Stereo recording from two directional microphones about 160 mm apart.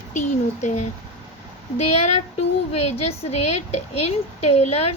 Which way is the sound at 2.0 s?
45° left (ahead or behind).